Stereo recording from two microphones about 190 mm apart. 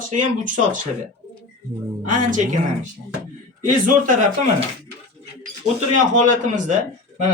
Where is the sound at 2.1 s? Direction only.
40° right (ahead or behind).